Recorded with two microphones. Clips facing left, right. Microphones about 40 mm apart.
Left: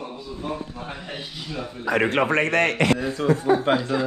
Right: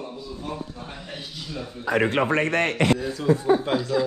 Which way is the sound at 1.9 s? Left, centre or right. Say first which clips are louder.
Left 1 dB; left.